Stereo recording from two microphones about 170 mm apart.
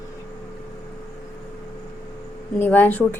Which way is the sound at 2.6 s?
10° left (ahead or behind).